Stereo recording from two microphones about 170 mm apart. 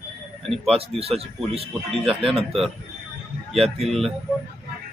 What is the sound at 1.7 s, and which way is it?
Speech, centre (ahead or behind).